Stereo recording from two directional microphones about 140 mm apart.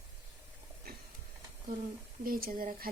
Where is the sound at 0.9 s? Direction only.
90° right.